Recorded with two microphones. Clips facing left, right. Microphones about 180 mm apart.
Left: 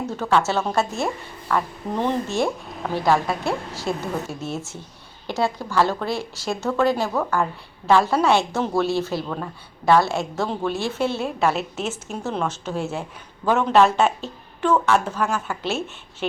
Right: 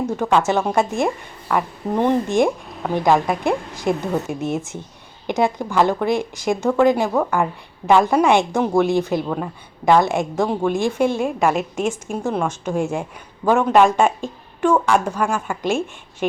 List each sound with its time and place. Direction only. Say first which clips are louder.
0.2 s a woman's voice: right 2 dB; 15° right (ahead or behind)